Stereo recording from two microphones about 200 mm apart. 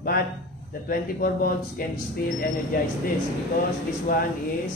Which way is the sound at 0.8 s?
45° left (ahead or behind).